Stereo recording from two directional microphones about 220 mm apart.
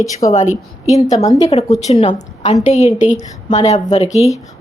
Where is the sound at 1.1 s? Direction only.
15° left (ahead or behind).